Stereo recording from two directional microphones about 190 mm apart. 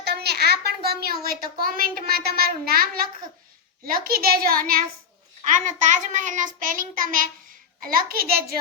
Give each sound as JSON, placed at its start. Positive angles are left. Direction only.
{"t": 0.0, "sound": "a child's voice", "side_deg": -60}